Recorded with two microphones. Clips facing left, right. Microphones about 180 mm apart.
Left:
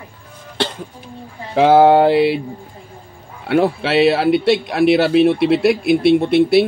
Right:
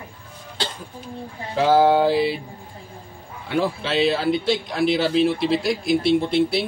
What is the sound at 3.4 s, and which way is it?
Speech, 65° left (ahead or behind).